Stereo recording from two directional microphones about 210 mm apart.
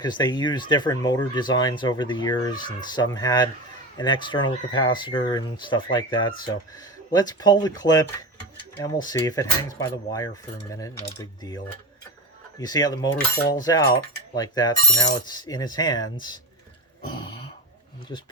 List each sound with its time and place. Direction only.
0.0 s speech: 20° left (ahead or behind)